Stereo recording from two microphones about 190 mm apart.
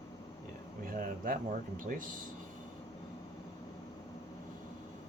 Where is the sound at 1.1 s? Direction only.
50° right (ahead or behind).